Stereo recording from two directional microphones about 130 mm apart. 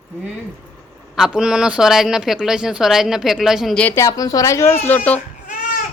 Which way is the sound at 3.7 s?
10° left (ahead or behind).